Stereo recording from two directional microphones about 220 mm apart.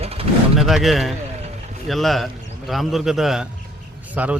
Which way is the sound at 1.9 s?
Centre (ahead or behind).